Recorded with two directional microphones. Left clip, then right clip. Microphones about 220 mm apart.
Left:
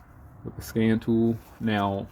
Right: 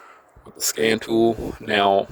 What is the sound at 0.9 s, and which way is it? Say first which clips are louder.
Speech: right 7 dB; 50° right (ahead or behind).